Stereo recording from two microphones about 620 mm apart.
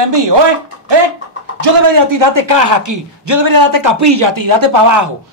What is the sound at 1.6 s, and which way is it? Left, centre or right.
A man's voice, right.